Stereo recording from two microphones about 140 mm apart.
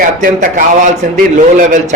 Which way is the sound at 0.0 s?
75° right (ahead or behind).